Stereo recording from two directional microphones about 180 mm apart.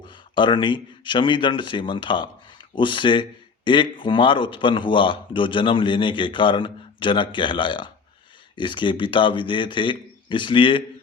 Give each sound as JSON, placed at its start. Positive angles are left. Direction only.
{"t": 0.1, "sound": "a man's voice", "side_deg": 25}